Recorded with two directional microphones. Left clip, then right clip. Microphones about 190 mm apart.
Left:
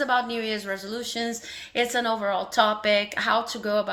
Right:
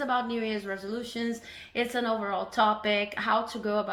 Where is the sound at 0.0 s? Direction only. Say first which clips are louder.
Left 4 dB; 40° left (ahead or behind).